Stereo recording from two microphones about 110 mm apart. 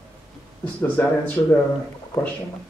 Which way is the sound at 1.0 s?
15° left (ahead or behind).